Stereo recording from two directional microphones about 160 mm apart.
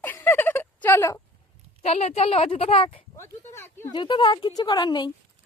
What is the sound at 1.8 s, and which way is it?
A woman's voice, 40° left (ahead or behind).